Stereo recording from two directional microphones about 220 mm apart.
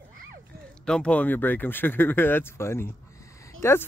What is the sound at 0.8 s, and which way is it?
Speech, 5° left (ahead or behind).